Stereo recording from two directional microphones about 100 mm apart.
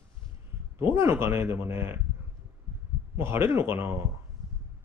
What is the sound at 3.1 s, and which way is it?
Speech, 25° right (ahead or behind).